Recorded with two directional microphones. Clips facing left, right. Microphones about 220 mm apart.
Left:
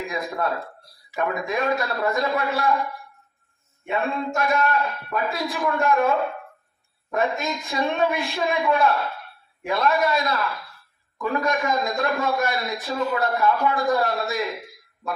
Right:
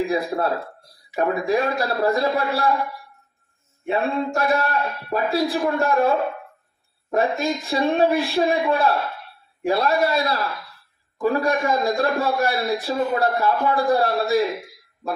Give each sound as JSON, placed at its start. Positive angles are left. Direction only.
{"t": 0.1, "sound": "a man's voice", "side_deg": -35}
{"t": 3.8, "sound": "a man's voice", "side_deg": -35}